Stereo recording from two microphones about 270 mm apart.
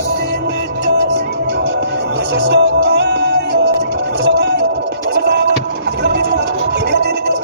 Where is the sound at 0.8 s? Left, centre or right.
Right.